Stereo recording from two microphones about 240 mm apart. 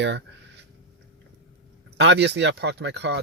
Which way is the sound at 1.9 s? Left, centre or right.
Right.